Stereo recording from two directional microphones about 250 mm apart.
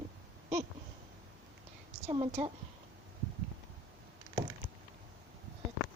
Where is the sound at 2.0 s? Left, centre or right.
Centre.